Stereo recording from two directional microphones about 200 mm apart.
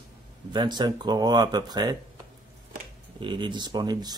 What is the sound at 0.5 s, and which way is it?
Speech, 20° right (ahead or behind).